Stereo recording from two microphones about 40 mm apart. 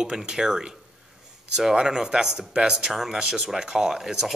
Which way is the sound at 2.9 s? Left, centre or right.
Centre.